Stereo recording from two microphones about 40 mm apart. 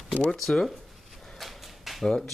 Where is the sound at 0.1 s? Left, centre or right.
Left.